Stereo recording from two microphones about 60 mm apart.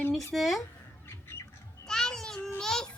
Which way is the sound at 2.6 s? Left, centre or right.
Centre.